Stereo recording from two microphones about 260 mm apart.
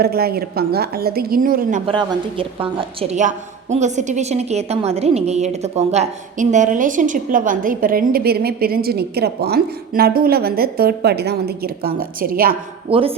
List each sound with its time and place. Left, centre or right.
0.0 s a woman's voice: right
1.9 s a woman's voice: centre
12.9 s speech: right